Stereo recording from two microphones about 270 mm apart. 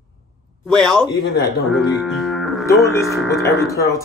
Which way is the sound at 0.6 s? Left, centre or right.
Centre.